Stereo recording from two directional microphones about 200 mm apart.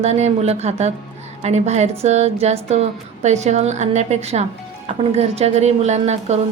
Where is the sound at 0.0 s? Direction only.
30° right (ahead or behind).